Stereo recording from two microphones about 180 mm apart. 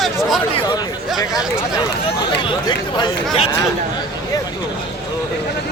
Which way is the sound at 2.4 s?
25° left (ahead or behind).